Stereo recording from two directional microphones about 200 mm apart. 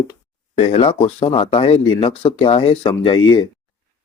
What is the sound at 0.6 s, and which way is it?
Speech, 30° left (ahead or behind).